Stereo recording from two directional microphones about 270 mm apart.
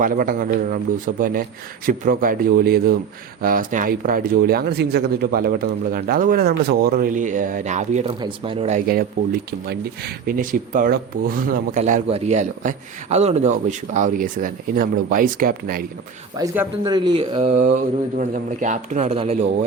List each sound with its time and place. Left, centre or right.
0.0 s speech: right
16.4 s speech: centre